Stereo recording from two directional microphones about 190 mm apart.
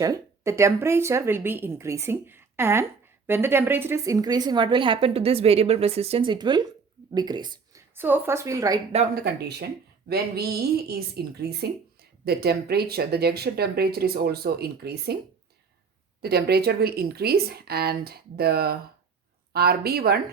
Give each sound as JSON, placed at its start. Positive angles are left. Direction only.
{"t": 0.0, "sound": "a woman's voice", "side_deg": -15}
{"t": 7.9, "sound": "speech", "side_deg": -10}
{"t": 9.2, "sound": "speech", "side_deg": -60}
{"t": 16.2, "sound": "speech", "side_deg": -55}